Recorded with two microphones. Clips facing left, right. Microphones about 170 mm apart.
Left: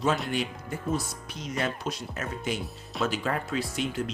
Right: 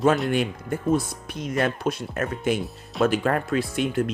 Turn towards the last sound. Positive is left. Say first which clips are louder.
# right 6 dB
turn(degrees=-55)  # may be behind; listen again after turning